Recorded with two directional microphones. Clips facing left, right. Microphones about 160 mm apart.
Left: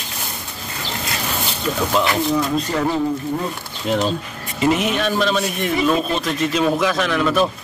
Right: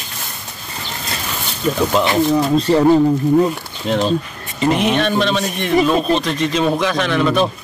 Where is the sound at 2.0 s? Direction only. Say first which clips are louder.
Right 4 dB; 30° right (ahead or behind).